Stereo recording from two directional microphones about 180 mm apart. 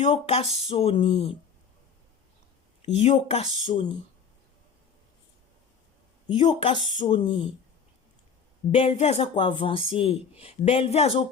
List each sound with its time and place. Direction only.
0.0 s speech: 35° left (ahead or behind)
2.8 s speech: 35° left (ahead or behind)
6.5 s speech: 25° left (ahead or behind)
8.7 s speech: 35° left (ahead or behind)